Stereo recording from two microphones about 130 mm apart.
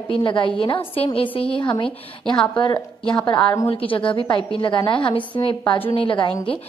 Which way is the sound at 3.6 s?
45° left (ahead or behind).